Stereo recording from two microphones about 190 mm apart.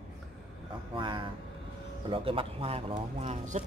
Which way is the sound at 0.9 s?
25° right (ahead or behind).